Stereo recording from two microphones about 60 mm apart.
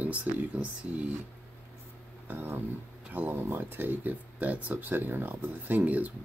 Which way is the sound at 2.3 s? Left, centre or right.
Right.